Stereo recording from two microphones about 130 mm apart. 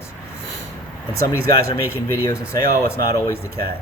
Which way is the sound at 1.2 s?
20° left (ahead or behind).